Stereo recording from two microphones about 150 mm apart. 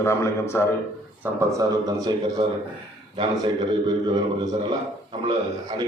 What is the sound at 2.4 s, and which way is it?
A man's voice, 35° right (ahead or behind).